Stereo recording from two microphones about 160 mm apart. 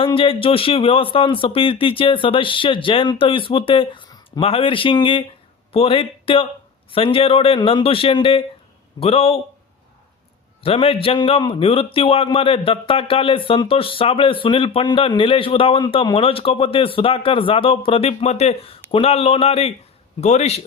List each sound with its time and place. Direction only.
0.0 s a man's voice: 35° left (ahead or behind)
10.6 s a man's voice: 35° left (ahead or behind)